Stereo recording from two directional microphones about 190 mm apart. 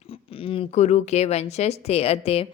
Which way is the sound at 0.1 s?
30° left (ahead or behind).